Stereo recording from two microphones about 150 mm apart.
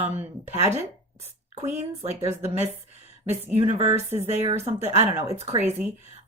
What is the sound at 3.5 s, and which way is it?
Speech, 45° right (ahead or behind).